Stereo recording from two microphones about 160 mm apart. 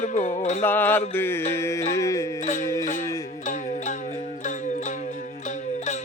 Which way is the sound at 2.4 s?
45° left (ahead or behind).